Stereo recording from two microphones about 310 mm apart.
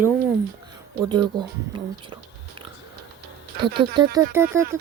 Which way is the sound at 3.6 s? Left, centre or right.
Centre.